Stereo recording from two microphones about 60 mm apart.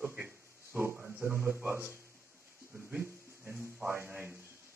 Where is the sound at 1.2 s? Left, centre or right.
Right.